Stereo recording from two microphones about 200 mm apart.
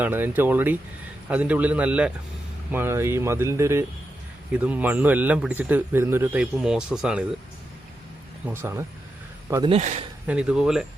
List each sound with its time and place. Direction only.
0.0 s speech: 10° right (ahead or behind)
8.4 s a man's voice: 10° right (ahead or behind)
9.7 s speech: 35° right (ahead or behind)
10.2 s speech: 5° right (ahead or behind)